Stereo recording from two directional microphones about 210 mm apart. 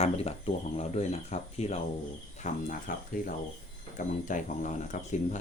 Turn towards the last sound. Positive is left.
turn(degrees=35)  # may be behind; listen again after turning